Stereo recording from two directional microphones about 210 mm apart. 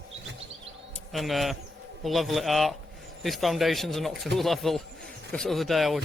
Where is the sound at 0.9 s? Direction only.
Centre (ahead or behind).